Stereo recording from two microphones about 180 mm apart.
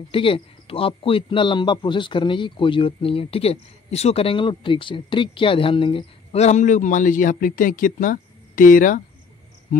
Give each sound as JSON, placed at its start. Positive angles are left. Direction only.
{"t": 0.1, "sound": "a man's voice", "side_deg": 30}